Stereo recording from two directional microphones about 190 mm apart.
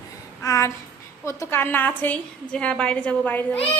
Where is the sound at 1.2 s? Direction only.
15° left (ahead or behind).